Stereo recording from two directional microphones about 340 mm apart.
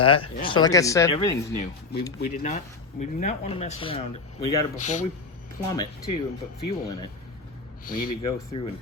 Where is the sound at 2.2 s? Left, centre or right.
Left.